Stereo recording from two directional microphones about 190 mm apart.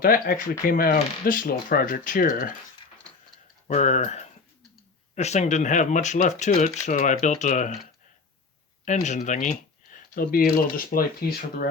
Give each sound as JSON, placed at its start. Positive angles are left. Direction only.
{"t": 0.0, "sound": "speech", "side_deg": 50}
{"t": 3.7, "sound": "speech", "side_deg": 35}
{"t": 8.8, "sound": "speech", "side_deg": 40}